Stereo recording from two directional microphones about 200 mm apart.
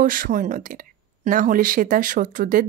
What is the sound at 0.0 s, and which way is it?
Speech, 45° right (ahead or behind).